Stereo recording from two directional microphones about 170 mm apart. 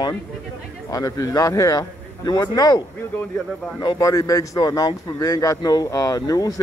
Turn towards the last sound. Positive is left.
turn(degrees=20)  # may be behind; listen again after turning